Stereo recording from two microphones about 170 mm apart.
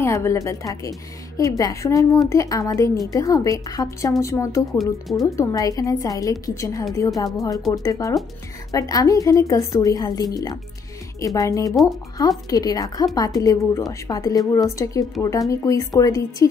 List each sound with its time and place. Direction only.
0.0 s a woman's voice: 15° left (ahead or behind)